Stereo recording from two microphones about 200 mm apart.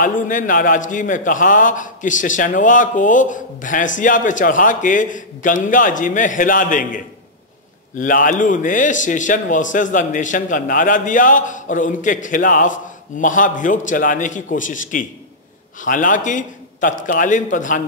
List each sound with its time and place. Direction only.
0.0 s a man's voice: 40° left (ahead or behind)